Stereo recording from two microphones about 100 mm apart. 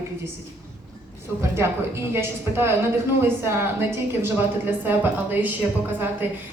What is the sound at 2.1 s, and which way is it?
A woman's voice, 25° right (ahead or behind).